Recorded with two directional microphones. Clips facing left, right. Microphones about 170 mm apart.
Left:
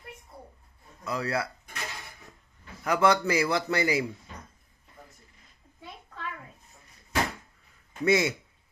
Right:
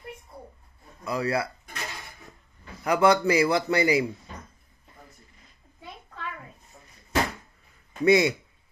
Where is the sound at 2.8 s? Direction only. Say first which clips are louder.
Right 3 dB; 15° right (ahead or behind).